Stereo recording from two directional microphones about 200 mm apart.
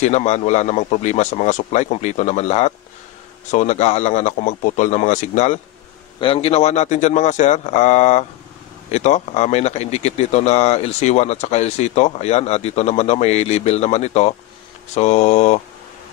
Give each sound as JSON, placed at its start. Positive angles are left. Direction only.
{"t": 0.0, "sound": "speech", "side_deg": 35}